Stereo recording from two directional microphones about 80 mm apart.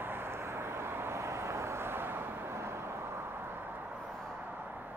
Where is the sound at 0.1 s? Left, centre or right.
Right.